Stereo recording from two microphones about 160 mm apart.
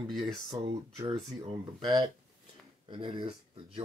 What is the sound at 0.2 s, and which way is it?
Speech, 35° right (ahead or behind).